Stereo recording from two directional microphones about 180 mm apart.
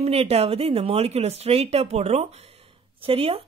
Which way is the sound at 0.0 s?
35° right (ahead or behind).